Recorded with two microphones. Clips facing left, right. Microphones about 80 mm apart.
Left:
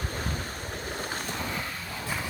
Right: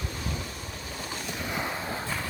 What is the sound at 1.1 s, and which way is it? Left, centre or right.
Vehicle, left.